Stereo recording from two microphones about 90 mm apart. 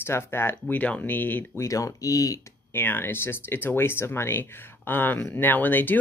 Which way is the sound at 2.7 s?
25° left (ahead or behind).